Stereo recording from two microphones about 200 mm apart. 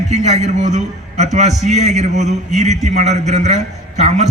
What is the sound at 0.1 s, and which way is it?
A man's voice, 35° right (ahead or behind).